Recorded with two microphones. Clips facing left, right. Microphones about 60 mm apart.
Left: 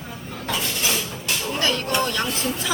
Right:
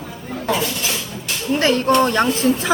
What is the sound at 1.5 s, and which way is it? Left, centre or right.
A woman's voice, right.